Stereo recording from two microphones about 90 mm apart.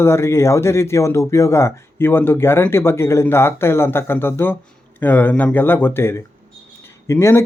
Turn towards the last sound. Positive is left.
turn(degrees=30)  # may be behind; listen again after turning